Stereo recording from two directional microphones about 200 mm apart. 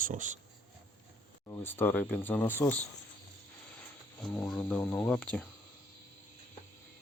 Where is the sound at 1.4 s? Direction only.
10° left (ahead or behind).